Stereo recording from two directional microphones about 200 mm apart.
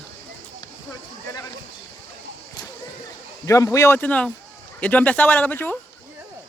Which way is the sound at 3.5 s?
15° left (ahead or behind).